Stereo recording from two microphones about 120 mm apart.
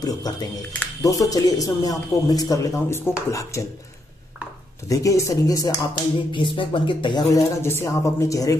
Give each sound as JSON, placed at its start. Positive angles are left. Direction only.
{"t": 0.0, "sound": "a man's voice", "side_deg": 35}
{"t": 4.8, "sound": "a man's voice", "side_deg": 25}
{"t": 6.3, "sound": "speech", "side_deg": 45}
{"t": 7.6, "sound": "a man's voice", "side_deg": 25}